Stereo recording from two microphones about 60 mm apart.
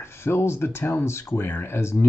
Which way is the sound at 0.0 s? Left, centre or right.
Left.